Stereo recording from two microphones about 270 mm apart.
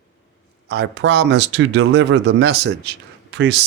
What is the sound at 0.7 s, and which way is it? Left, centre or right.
Speech, right.